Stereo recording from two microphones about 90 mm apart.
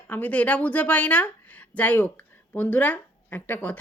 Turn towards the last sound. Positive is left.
turn(degrees=20)  # may be behind; listen again after turning